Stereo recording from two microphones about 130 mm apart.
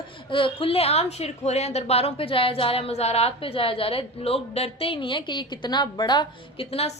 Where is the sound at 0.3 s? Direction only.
40° left (ahead or behind).